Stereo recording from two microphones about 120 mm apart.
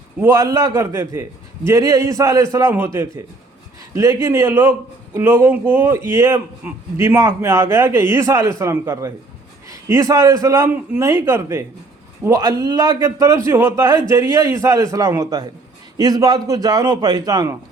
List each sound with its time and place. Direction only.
0.2 s a man's voice: 25° right (ahead or behind)
12.4 s a man's voice: 35° right (ahead or behind)